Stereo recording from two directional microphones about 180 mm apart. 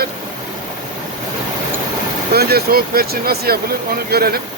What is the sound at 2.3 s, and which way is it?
Speech, 60° right (ahead or behind).